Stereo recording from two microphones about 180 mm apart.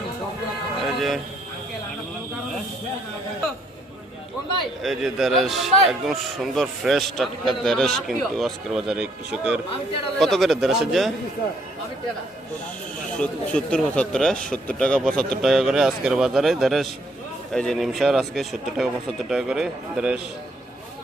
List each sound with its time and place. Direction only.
0.8 s vehicle: centre (ahead or behind)
4.8 s speech: centre (ahead or behind)
13.1 s speech: 5° left (ahead or behind)